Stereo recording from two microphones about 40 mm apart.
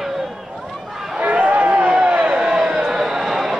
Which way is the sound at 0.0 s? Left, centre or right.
Centre.